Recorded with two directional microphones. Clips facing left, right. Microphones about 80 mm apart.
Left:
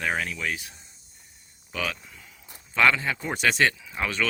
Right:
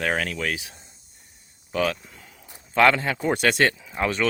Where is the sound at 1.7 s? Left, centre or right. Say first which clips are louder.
Right 7 dB; right.